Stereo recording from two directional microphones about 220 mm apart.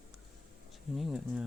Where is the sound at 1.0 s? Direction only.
Centre (ahead or behind).